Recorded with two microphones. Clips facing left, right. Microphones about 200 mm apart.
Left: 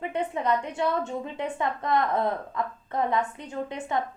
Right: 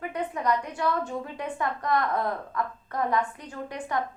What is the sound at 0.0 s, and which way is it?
A woman's voice, 25° left (ahead or behind).